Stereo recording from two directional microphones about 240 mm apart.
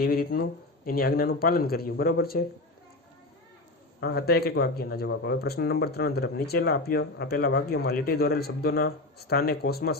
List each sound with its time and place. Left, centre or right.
0.0 s speech: left
4.0 s speech: left